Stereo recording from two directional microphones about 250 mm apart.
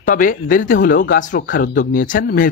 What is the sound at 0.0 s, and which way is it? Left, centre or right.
Speech, left.